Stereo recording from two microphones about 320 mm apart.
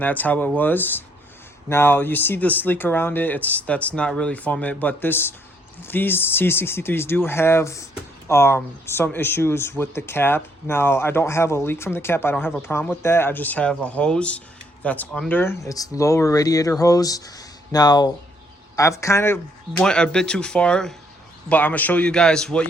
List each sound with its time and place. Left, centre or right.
0.0 s speech: centre